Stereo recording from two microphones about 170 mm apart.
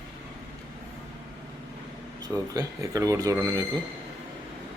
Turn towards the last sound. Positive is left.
turn(degrees=-20)  # may be behind; listen again after turning